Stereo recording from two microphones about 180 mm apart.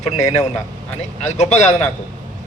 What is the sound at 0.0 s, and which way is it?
Speech, 40° left (ahead or behind).